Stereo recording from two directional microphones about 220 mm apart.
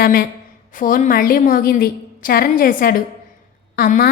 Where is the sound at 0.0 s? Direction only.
45° left (ahead or behind).